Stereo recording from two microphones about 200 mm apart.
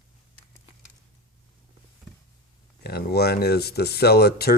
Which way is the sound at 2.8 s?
50° left (ahead or behind).